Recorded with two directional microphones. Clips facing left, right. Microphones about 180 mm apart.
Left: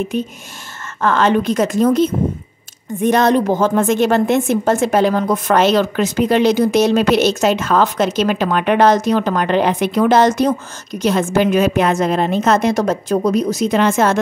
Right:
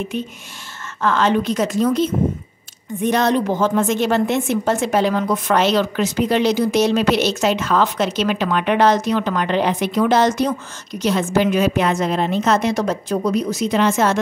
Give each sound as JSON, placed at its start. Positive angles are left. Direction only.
{"t": 0.1, "sound": "a woman's voice", "side_deg": 40}